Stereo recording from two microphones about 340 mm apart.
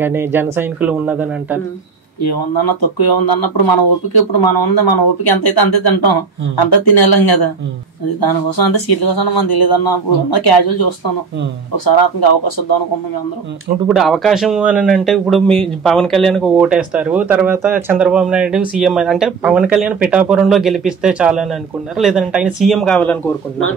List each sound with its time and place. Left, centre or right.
0.0 s speech: centre
2.2 s speech: left
12.0 s speech: left
13.8 s speech: centre